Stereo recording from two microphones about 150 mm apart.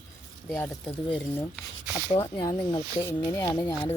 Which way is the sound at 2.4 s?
25° left (ahead or behind).